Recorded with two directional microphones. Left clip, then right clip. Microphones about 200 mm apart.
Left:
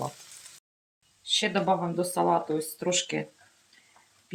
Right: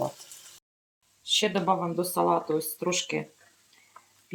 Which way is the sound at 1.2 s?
15° right (ahead or behind).